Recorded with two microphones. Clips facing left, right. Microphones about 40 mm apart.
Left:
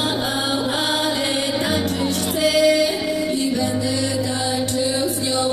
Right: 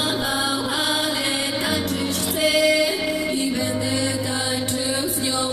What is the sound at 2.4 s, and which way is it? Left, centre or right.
Music, centre.